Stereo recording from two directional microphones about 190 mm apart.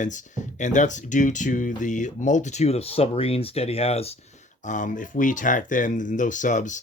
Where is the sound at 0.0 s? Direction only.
40° left (ahead or behind).